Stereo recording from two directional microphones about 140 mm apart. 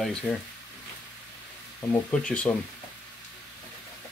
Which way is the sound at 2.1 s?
5° left (ahead or behind).